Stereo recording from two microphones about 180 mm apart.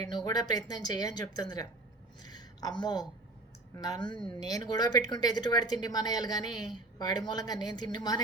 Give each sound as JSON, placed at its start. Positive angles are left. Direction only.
{"t": 0.0, "sound": "a woman's voice", "side_deg": 20}